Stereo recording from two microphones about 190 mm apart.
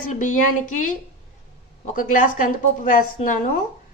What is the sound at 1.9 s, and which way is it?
A woman's voice, 45° left (ahead or behind).